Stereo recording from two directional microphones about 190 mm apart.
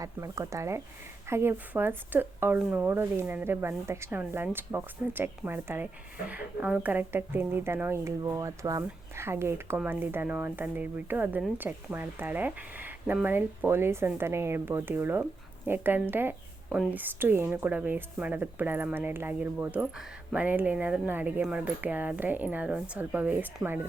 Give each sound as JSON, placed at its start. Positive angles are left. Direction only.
{"t": 0.0, "sound": "speech", "side_deg": -15}